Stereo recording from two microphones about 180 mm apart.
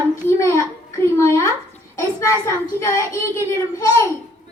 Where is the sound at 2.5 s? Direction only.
15° left (ahead or behind).